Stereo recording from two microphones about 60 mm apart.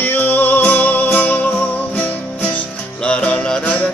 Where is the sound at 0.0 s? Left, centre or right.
Left.